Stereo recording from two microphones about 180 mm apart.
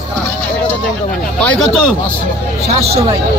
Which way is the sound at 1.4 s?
5° left (ahead or behind).